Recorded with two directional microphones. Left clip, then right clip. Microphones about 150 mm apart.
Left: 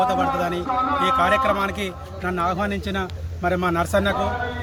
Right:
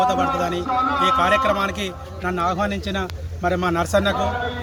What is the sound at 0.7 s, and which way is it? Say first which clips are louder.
Speech: right 2 dB; 55° right (ahead or behind).